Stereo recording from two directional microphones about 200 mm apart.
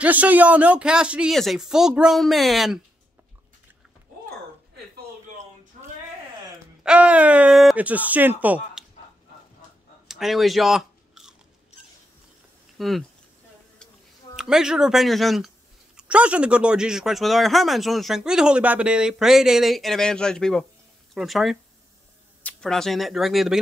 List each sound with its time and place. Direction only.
0.0 s speech: 5° right (ahead or behind)
5.7 s a sound: 35° right (ahead or behind)
6.8 s speech: 5° right (ahead or behind)
10.0 s chewing: centre (ahead or behind)
12.7 s speech: centre (ahead or behind)
14.3 s speech: 5° right (ahead or behind)